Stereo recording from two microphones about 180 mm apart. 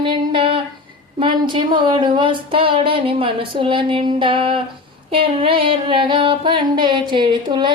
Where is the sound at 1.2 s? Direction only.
25° right (ahead or behind).